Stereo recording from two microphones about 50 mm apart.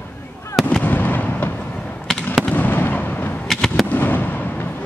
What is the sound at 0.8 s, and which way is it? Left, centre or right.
Fireworks, left.